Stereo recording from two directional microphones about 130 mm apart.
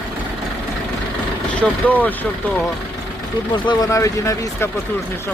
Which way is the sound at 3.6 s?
30° left (ahead or behind).